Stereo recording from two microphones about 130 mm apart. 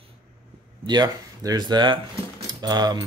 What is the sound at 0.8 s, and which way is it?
Speech, 30° right (ahead or behind).